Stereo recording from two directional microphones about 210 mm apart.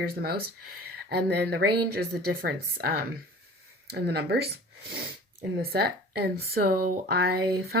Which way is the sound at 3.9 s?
50° right (ahead or behind).